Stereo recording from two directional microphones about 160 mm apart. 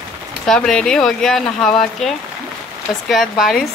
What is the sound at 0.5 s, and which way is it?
Speech, 5° left (ahead or behind).